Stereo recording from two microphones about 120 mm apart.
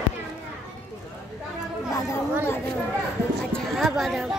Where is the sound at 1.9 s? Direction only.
25° left (ahead or behind).